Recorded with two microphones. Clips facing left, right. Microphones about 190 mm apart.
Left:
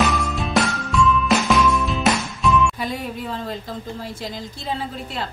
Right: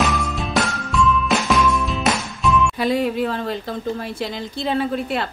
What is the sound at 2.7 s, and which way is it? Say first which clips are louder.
Speech: right 8 dB; 75° right (ahead or behind).